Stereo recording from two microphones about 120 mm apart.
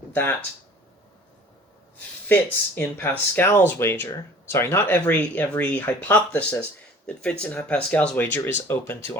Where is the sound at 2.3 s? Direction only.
15° left (ahead or behind).